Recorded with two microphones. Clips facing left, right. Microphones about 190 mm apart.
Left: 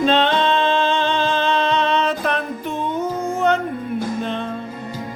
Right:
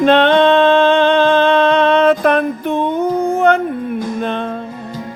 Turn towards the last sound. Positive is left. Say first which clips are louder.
# right 3 dB
turn(degrees=-60)  # may be behind; listen again after turning